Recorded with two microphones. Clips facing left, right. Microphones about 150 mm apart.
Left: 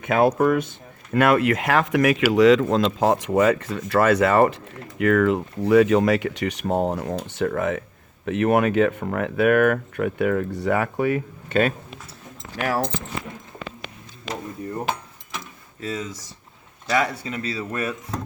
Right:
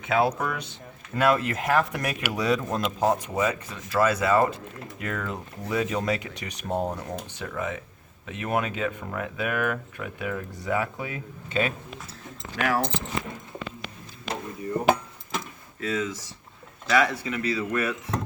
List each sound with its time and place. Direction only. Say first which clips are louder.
0.0 s speech: left 6 dB; 50° left (ahead or behind)
1.1 s speech: left 5 dB; 65° left (ahead or behind)
12.6 s speech: left 2 dB; 35° left (ahead or behind)
15.8 s speech: right 1 dB; 35° left (ahead or behind)